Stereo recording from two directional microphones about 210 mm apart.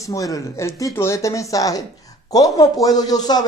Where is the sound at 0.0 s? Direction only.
15° left (ahead or behind).